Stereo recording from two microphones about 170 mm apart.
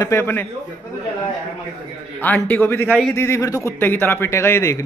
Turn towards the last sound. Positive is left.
turn(degrees=15)  # may be behind; listen again after turning